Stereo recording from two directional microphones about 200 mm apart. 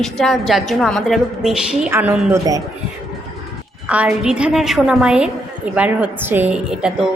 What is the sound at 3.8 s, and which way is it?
A woman's voice, 5° right (ahead or behind).